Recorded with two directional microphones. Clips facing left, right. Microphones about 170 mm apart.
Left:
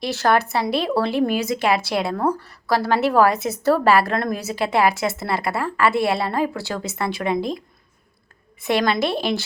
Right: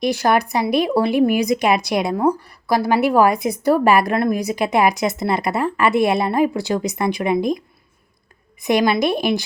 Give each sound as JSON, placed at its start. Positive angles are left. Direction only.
{"t": 0.0, "sound": "speech", "side_deg": -15}
{"t": 8.6, "sound": "speech", "side_deg": -15}